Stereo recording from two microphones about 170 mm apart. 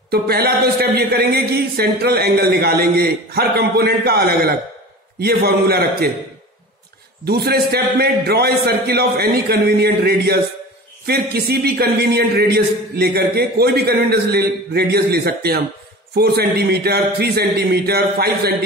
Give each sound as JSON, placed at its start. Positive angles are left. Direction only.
{"t": 0.1, "sound": "a man's voice", "side_deg": -65}
{"t": 7.2, "sound": "a man's voice", "side_deg": -70}